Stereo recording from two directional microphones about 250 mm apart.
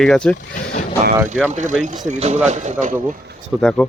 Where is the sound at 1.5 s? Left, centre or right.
Right.